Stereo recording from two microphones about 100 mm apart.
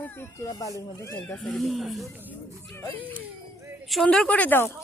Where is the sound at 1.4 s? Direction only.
Centre (ahead or behind).